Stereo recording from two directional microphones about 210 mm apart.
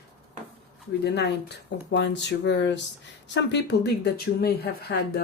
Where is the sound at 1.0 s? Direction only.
55° left (ahead or behind).